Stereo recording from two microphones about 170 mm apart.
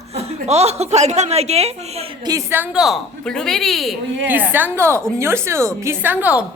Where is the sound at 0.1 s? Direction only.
40° right (ahead or behind).